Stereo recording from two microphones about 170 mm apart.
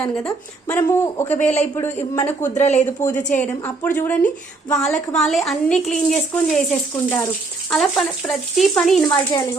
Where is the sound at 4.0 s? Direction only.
10° left (ahead or behind).